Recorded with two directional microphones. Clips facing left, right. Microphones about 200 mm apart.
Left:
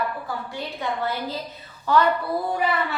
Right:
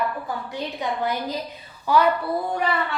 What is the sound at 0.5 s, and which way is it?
A woman's voice, 15° right (ahead or behind).